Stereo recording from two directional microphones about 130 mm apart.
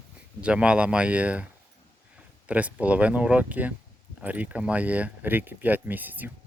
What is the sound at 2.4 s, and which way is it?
Speech, 10° right (ahead or behind).